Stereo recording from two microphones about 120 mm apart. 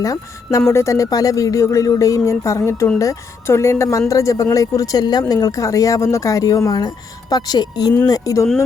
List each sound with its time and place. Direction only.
0.0 s speech: 30° left (ahead or behind)